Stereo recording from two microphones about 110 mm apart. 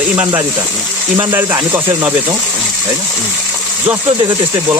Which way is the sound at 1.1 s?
25° right (ahead or behind).